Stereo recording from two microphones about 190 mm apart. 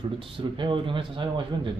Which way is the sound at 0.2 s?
25° right (ahead or behind).